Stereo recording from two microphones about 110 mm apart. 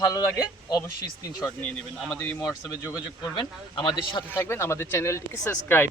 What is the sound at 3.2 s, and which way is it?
Speech, 45° left (ahead or behind).